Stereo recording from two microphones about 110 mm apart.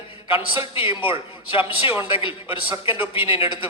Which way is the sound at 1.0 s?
55° left (ahead or behind).